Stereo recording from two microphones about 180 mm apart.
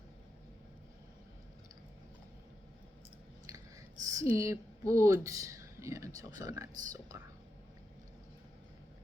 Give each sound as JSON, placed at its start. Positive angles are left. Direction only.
{"t": 4.0, "sound": "speech", "side_deg": -15}